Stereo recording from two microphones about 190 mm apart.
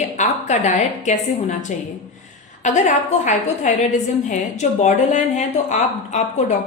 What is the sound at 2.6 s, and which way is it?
A woman's voice, 40° left (ahead or behind).